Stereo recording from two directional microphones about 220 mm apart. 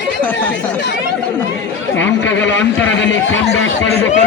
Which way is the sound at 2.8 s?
55° left (ahead or behind).